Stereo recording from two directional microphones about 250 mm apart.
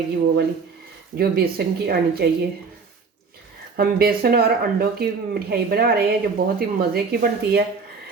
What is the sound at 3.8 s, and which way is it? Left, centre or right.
Speech, right.